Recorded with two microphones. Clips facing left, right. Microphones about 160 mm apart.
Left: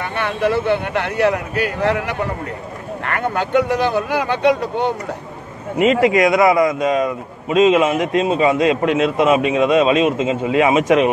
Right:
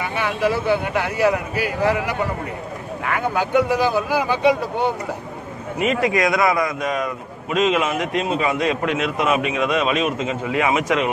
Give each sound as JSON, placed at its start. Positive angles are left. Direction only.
{"t": 0.0, "sound": "speech", "side_deg": -5}
{"t": 3.2, "sound": "speech", "side_deg": -5}
{"t": 5.8, "sound": "a man's voice", "side_deg": 20}